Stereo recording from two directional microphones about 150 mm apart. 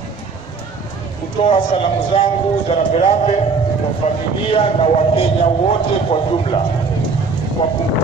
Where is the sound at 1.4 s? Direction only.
35° left (ahead or behind).